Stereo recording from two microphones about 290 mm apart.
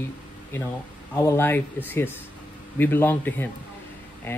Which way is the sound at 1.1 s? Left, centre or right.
Centre.